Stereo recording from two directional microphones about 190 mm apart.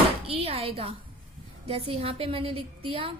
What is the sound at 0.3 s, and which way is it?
A woman's voice, 30° right (ahead or behind).